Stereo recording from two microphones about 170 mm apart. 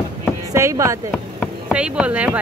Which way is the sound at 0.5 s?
15° right (ahead or behind).